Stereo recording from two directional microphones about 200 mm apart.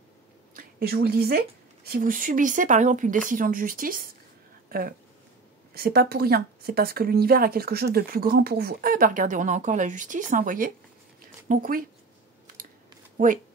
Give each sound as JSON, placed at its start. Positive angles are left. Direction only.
{"t": 0.6, "sound": "speech", "side_deg": -50}
{"t": 13.2, "sound": "speech", "side_deg": -45}